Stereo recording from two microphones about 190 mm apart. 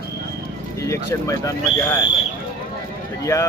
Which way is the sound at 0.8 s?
15° left (ahead or behind).